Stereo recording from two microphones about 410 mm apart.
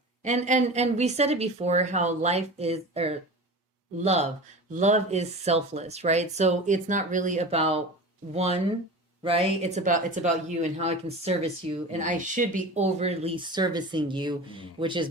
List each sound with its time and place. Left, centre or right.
0.2 s speech: centre